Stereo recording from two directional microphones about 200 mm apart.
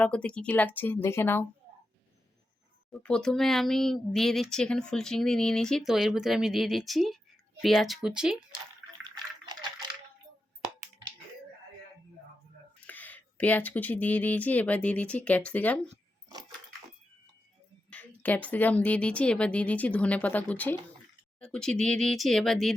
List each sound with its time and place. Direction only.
0.0 s speech: 5° left (ahead or behind)
2.9 s speech: 5° left (ahead or behind)
9.0 s bathtub: 20° right (ahead or behind)
12.8 s speech: 10° left (ahead or behind)
17.9 s speech: 10° left (ahead or behind)